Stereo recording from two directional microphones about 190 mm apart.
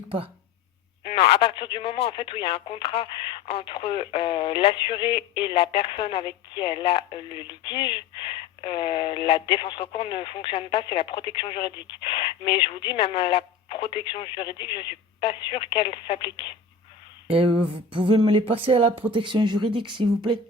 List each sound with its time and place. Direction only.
1.0 s speech: 30° left (ahead or behind)
17.2 s speech: 30° right (ahead or behind)